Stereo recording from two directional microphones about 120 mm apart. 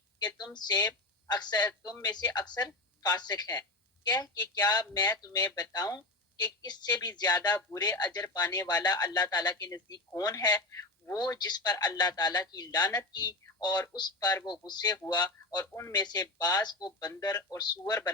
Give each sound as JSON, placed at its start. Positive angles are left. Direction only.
{"t": 0.2, "sound": "speech", "side_deg": 35}
{"t": 15.6, "sound": "a man's voice", "side_deg": 25}
{"t": 15.9, "sound": "speech", "side_deg": 35}